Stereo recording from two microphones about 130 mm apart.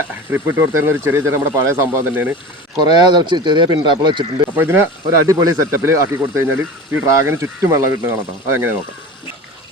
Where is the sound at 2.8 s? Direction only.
35° right (ahead or behind).